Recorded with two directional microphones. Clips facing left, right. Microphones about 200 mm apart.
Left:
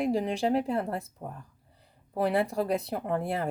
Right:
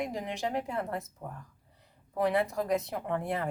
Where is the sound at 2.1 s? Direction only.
30° left (ahead or behind).